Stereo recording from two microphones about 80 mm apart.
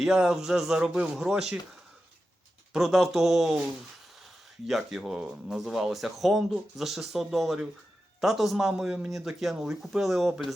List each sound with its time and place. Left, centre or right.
0.0 s speech: centre
2.7 s speech: centre